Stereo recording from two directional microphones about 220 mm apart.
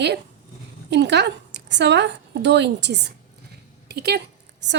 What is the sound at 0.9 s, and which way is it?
A woman's voice, 50° right (ahead or behind).